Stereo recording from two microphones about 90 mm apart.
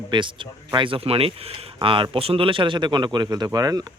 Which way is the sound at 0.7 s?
75° right (ahead or behind).